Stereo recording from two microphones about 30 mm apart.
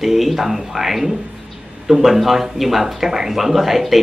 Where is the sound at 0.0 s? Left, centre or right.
Centre.